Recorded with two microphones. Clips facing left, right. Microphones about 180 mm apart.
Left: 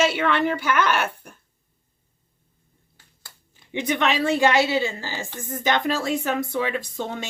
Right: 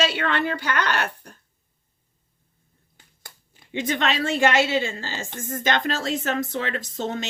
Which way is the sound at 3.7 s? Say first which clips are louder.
Left 2 dB; 15° left (ahead or behind).